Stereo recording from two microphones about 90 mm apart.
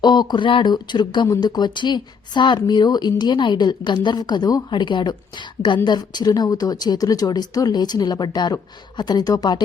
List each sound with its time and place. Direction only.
0.0 s a woman's voice: 55° left (ahead or behind)